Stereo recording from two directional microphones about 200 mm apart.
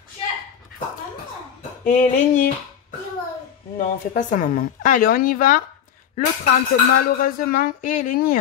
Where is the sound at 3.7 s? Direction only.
40° left (ahead or behind).